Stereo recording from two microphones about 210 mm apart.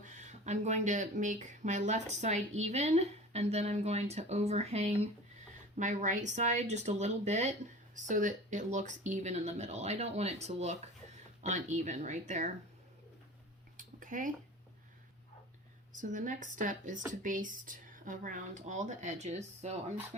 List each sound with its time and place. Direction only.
0.0 s speech: 35° right (ahead or behind)
13.7 s a sound: 40° right (ahead or behind)
15.9 s speech: 35° right (ahead or behind)